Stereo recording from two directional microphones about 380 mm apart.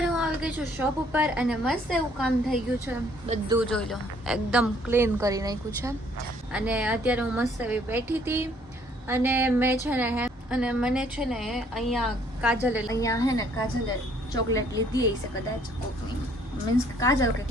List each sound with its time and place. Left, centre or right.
0.0 s a woman's voice: centre
3.2 s a woman's voice: centre
3.6 s a woman's voice: centre
12.9 s a woman's voice: centre
14.5 s a woman's voice: centre
17.0 s a woman's voice: centre